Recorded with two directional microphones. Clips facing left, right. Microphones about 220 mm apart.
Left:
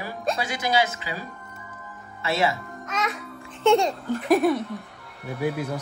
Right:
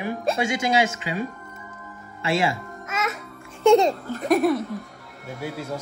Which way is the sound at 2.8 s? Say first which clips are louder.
Even; 5° right (ahead or behind).